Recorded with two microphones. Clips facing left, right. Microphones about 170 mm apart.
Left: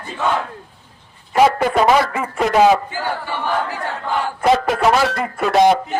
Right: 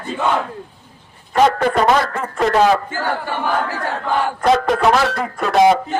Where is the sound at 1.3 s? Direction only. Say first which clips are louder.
Even; 5° left (ahead or behind).